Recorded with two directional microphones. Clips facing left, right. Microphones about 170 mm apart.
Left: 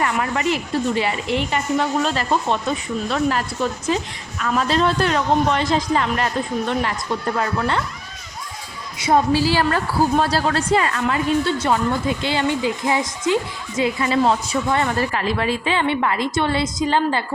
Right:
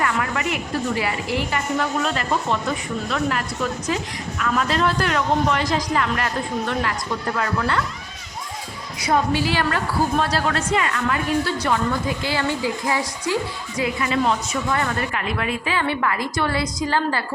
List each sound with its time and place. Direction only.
0.0 s a woman's voice: 25° left (ahead or behind)
9.0 s a woman's voice: 25° left (ahead or behind)